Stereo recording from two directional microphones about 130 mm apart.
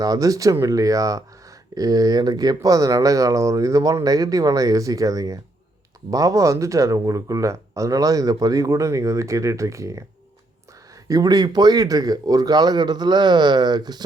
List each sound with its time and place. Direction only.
0.0 s speech: 30° right (ahead or behind)
11.1 s speech: 30° right (ahead or behind)